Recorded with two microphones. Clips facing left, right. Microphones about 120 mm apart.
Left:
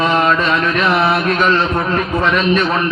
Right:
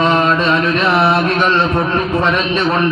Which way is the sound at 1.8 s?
30° right (ahead or behind).